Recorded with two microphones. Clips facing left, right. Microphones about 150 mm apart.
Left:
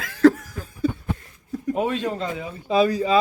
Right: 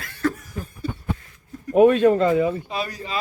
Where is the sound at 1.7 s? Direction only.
55° right (ahead or behind).